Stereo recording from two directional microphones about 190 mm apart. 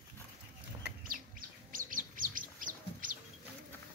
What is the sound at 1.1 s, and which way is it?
Bird, 45° right (ahead or behind).